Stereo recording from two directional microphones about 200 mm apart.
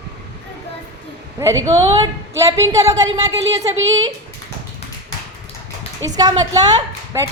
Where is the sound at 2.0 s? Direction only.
15° right (ahead or behind).